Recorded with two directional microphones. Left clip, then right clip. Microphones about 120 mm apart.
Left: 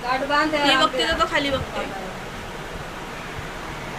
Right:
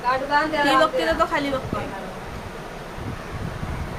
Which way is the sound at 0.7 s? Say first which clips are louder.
Right 1 dB; 50° right (ahead or behind).